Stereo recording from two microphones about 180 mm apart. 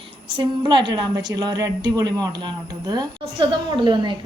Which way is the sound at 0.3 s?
25° right (ahead or behind).